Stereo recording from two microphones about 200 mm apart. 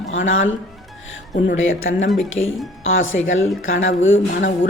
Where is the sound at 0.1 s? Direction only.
75° left (ahead or behind).